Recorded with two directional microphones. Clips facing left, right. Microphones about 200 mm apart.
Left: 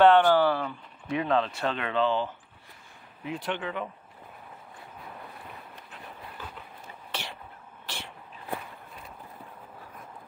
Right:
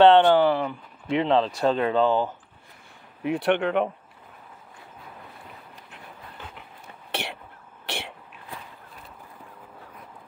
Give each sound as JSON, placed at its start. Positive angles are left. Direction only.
{"t": 0.0, "sound": "speech", "side_deg": -25}
{"t": 3.3, "sound": "speech", "side_deg": -70}
{"t": 7.1, "sound": "a sound", "side_deg": -70}